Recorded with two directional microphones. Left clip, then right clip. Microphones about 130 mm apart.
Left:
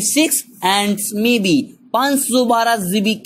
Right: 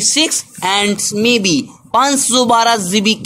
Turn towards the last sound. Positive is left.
turn(degrees=-30)  # may be behind; listen again after turning